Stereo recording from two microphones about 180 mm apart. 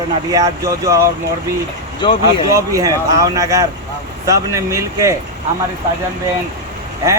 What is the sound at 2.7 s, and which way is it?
Speech, 20° right (ahead or behind).